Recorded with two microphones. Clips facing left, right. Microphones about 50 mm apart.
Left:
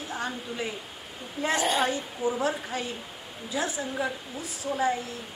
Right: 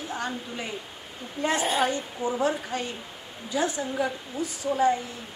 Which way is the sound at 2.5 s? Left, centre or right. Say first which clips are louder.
Right 2 dB; centre.